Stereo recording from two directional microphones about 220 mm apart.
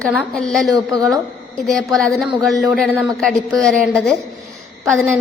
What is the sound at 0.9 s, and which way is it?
Speech, 15° right (ahead or behind).